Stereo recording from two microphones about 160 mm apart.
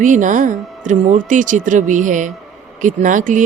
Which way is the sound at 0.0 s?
50° right (ahead or behind).